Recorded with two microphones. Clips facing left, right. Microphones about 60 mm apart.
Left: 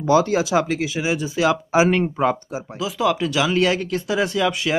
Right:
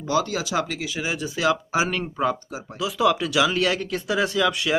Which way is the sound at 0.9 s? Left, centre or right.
Centre.